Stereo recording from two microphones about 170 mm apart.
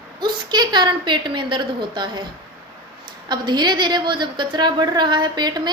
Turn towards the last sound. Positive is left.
turn(degrees=-25)  # may be behind; listen again after turning